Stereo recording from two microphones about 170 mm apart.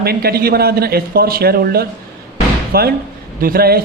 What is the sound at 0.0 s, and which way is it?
A man's voice, 65° right (ahead or behind).